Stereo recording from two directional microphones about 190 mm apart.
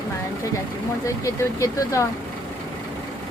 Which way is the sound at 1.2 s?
15° left (ahead or behind).